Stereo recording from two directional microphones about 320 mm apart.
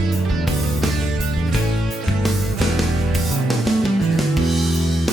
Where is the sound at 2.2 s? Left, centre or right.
Centre.